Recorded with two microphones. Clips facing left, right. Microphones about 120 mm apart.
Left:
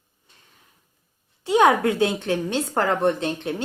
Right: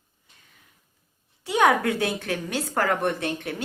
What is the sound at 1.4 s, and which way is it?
Speech, 20° left (ahead or behind).